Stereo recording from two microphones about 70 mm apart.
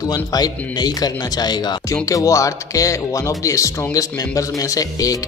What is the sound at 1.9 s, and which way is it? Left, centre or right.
Speech, left.